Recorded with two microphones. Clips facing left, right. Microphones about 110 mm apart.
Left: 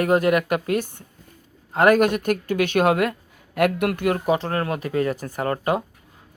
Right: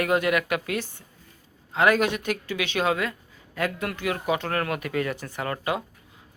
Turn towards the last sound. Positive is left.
turn(degrees=40)  # may be behind; listen again after turning